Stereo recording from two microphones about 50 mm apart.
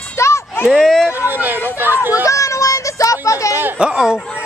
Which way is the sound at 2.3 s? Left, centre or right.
Left.